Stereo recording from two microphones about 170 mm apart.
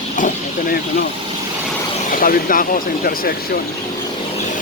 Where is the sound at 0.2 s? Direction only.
50° left (ahead or behind).